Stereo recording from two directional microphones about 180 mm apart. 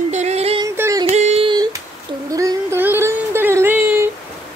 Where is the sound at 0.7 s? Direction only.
15° right (ahead or behind).